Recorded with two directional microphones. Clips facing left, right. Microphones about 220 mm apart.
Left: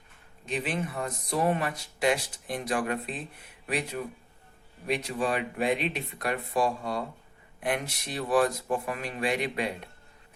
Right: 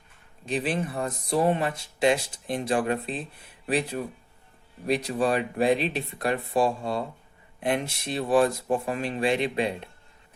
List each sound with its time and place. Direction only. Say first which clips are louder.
0.4 s speech: right 4 dB; 35° right (ahead or behind)